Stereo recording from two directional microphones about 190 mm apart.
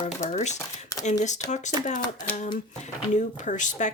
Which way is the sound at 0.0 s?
35° left (ahead or behind).